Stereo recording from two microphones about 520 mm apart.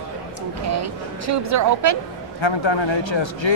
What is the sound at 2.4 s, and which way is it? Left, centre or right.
Speech, left.